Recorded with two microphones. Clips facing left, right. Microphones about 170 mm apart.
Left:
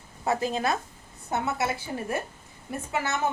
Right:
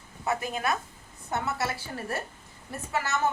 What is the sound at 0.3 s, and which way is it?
A woman's voice, 30° left (ahead or behind).